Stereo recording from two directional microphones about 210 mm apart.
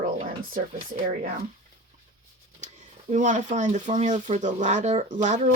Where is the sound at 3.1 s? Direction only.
35° right (ahead or behind).